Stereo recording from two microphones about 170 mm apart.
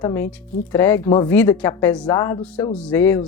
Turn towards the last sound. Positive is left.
turn(degrees=15)  # may be behind; listen again after turning